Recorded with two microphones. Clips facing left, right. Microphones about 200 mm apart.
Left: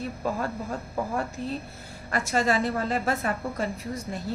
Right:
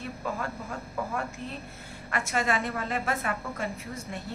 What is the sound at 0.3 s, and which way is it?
A woman's voice, 35° left (ahead or behind).